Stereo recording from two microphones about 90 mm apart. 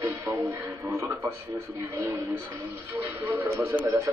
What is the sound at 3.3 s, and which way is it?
Speech, 30° right (ahead or behind).